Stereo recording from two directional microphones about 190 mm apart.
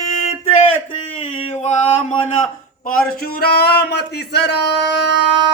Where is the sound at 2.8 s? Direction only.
55° left (ahead or behind).